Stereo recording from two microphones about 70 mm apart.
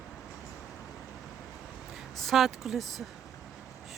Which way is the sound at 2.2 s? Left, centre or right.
Centre.